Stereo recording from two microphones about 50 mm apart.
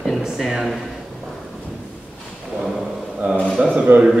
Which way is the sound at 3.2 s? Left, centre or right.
Right.